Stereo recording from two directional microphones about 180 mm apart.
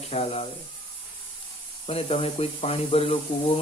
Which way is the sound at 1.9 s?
35° left (ahead or behind).